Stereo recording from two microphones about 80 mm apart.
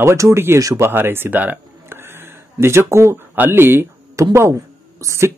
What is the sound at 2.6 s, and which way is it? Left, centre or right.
Speech, right.